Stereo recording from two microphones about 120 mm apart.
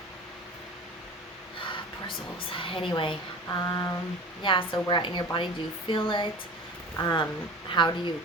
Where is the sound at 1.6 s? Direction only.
45° left (ahead or behind).